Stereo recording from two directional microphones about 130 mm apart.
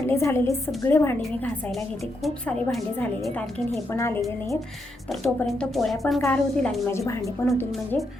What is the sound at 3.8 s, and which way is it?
Speech, 20° left (ahead or behind).